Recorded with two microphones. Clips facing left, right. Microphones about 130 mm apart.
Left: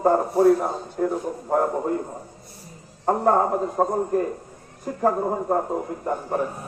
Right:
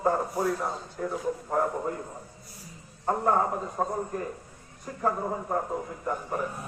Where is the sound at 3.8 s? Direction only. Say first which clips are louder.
Left 8 dB; 50° left (ahead or behind).